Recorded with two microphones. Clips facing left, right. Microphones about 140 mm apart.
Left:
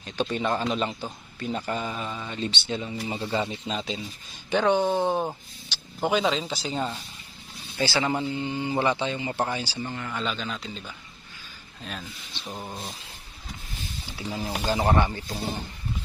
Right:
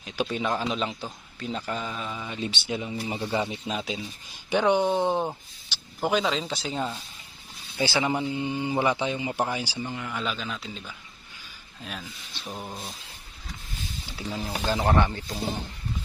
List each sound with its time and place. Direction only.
0.0 s a man's voice: 5° right (ahead or behind)
6.1 s a man's voice: centre (ahead or behind)
7.8 s a man's voice: 15° right (ahead or behind); by 13.0 s centre (ahead or behind)
14.2 s speech: 10° left (ahead or behind)
14.8 s speech: 15° left (ahead or behind)